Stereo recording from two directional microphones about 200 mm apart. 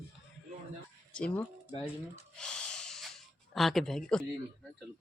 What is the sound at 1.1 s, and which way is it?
Speech, 5° left (ahead or behind).